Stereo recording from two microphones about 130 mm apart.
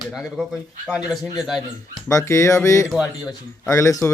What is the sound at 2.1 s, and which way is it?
Speech, 25° left (ahead or behind).